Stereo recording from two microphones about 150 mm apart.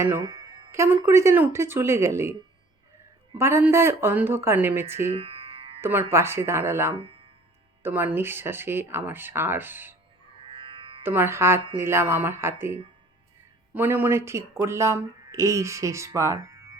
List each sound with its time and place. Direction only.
0.0 s speech: 25° right (ahead or behind)
3.3 s speech: 15° right (ahead or behind)
5.1 s music: 40° right (ahead or behind)
5.8 s speech: 15° right (ahead or behind)
6.9 s speech: 35° right (ahead or behind)
7.8 s speech: 15° right (ahead or behind)
10.4 s music: 35° right (ahead or behind)
11.0 s speech: 15° right (ahead or behind)